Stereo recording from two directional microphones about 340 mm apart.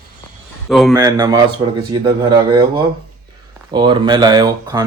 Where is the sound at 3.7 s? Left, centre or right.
Centre.